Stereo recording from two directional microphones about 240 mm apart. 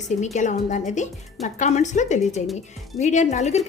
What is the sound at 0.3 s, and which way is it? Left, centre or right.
A woman's voice, left.